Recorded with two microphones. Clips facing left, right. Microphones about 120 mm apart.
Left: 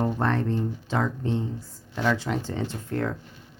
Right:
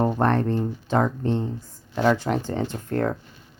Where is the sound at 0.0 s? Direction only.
50° right (ahead or behind).